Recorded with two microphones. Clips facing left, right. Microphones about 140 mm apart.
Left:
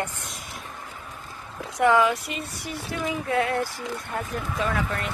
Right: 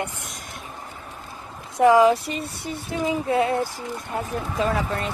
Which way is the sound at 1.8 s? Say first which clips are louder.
Right 5 dB; 25° right (ahead or behind).